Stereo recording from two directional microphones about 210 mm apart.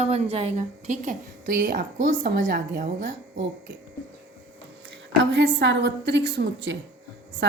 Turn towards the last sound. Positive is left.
turn(degrees=-55)  # may be behind; listen again after turning